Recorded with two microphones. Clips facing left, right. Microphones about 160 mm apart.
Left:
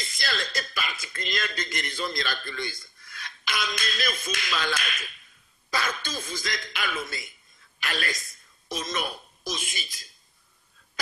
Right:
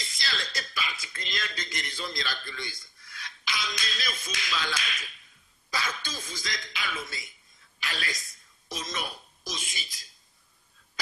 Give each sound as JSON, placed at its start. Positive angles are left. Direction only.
{"t": 0.0, "sound": "a woman's voice", "side_deg": 55}